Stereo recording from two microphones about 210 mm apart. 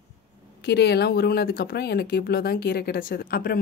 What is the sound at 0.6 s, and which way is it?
Speech, 50° left (ahead or behind).